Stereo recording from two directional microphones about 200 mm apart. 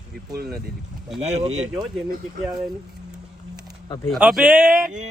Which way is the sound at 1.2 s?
35° right (ahead or behind).